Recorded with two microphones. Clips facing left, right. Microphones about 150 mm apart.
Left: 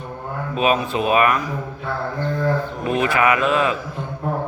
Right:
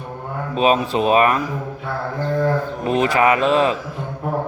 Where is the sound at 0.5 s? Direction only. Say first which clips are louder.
Right 2 dB; 35° right (ahead or behind).